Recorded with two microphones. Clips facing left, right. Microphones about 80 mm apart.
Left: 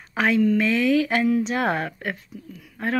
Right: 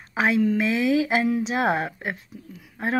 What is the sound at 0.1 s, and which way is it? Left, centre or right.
Speech, centre.